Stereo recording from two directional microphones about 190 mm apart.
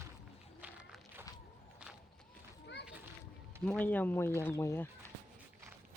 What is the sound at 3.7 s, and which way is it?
Speech, 10° left (ahead or behind).